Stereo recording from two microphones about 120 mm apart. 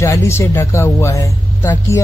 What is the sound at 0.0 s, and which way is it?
Speech, 25° left (ahead or behind).